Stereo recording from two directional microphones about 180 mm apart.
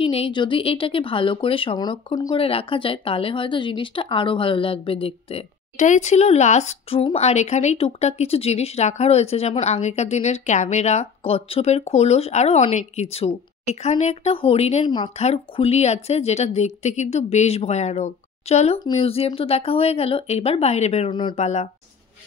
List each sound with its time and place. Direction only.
0.0 s speech: 30° left (ahead or behind)